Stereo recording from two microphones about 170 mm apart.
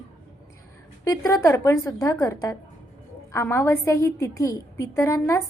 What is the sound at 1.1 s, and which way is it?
A woman's voice, 20° left (ahead or behind).